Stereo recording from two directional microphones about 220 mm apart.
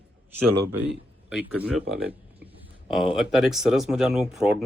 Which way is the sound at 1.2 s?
5° right (ahead or behind).